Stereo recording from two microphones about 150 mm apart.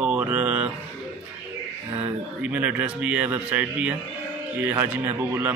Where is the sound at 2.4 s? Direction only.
10° right (ahead or behind).